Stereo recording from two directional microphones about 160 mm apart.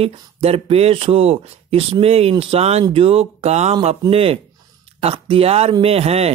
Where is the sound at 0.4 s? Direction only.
40° right (ahead or behind).